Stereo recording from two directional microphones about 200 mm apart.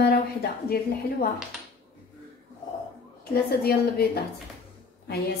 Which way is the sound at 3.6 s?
50° left (ahead or behind).